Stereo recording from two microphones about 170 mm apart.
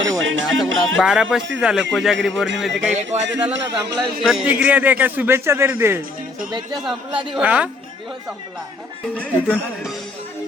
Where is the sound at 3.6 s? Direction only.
90° right.